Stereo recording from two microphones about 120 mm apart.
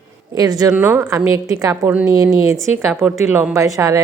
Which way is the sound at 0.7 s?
15° right (ahead or behind).